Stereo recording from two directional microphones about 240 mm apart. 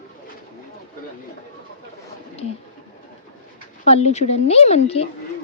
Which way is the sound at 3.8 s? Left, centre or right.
Left.